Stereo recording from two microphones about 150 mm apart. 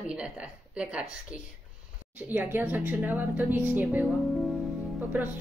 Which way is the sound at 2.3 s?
15° right (ahead or behind).